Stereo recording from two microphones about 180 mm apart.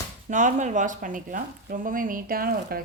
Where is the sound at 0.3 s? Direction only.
45° right (ahead or behind).